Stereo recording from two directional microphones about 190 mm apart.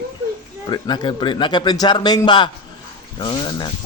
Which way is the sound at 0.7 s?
20° left (ahead or behind).